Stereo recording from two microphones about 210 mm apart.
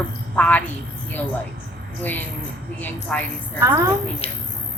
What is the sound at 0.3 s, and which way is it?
Speech, 5° left (ahead or behind).